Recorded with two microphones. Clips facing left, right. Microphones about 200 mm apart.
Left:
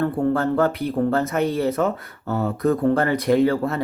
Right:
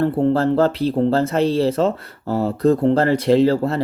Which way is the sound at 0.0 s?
25° right (ahead or behind).